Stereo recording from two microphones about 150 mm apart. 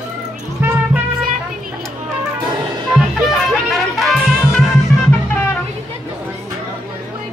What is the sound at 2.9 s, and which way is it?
Music, centre (ahead or behind).